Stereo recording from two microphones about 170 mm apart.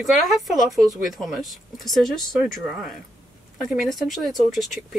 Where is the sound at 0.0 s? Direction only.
Centre (ahead or behind).